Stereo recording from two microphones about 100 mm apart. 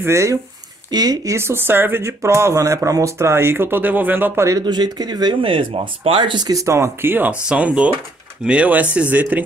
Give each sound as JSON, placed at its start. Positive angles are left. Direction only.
{"t": 0.0, "sound": "speech", "side_deg": -30}
{"t": 4.5, "sound": "speech", "side_deg": -40}
{"t": 5.4, "sound": "speech", "side_deg": -65}
{"t": 6.3, "sound": "speech", "side_deg": -40}